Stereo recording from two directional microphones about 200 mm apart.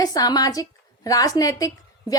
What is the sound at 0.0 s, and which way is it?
A woman's voice, 20° left (ahead or behind).